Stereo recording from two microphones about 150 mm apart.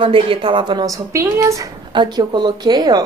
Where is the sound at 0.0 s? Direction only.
35° right (ahead or behind).